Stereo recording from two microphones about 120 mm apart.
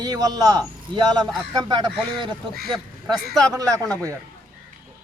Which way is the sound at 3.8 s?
10° left (ahead or behind).